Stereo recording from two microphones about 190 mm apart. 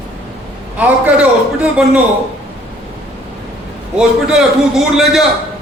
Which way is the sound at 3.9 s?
5° right (ahead or behind).